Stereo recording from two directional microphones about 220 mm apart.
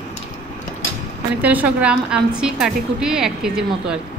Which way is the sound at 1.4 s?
5° right (ahead or behind).